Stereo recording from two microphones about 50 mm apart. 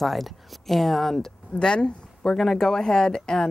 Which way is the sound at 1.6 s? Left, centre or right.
Centre.